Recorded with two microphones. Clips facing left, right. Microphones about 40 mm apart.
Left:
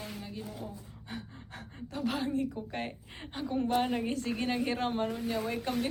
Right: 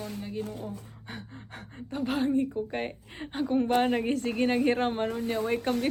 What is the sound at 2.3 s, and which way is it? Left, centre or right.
Speech, centre.